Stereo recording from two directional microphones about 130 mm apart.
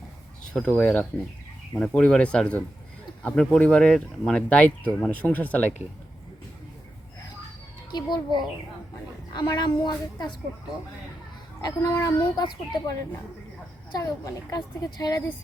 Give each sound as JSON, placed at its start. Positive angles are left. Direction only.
{"t": 0.5, "sound": "speech", "side_deg": 10}
{"t": 7.9, "sound": "speech", "side_deg": 35}
{"t": 11.6, "sound": "speech", "side_deg": 30}
{"t": 14.0, "sound": "a woman's voice", "side_deg": 25}